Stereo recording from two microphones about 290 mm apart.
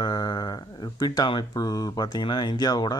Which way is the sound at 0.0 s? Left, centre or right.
Centre.